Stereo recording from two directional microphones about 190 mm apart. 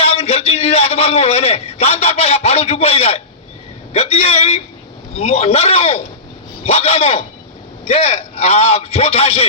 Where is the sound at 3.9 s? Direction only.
35° left (ahead or behind).